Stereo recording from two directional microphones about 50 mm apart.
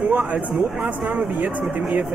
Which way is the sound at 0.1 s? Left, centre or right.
Right.